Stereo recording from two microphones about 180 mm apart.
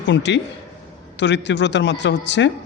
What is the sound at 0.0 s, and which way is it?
A man's voice, 80° left.